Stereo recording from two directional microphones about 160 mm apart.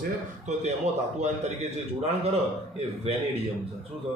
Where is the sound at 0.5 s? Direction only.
50° right (ahead or behind).